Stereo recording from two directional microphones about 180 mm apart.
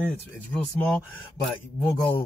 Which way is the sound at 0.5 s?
5° left (ahead or behind).